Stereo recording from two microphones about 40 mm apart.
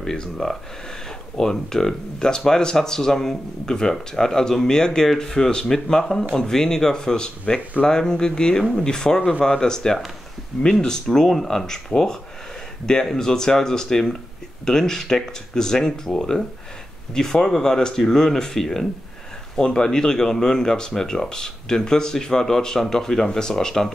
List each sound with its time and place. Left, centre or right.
0.0 s speech: centre